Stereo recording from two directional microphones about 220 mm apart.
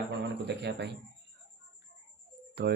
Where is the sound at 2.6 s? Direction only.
45° right (ahead or behind).